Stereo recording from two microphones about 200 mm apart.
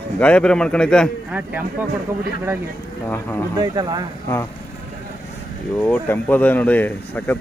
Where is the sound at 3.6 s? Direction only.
20° right (ahead or behind).